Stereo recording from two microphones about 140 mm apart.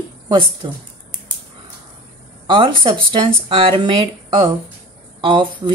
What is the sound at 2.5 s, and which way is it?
Speech, 40° right (ahead or behind).